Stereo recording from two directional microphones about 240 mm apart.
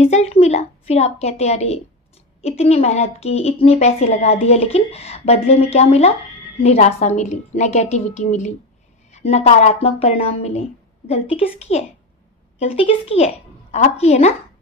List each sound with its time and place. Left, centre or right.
0.0 s a woman's voice: left